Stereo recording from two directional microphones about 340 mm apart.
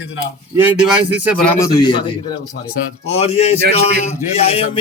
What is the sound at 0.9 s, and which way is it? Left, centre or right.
Speech, centre.